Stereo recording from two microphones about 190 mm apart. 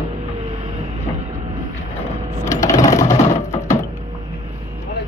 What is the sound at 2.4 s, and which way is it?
Sewing machine, 15° left (ahead or behind).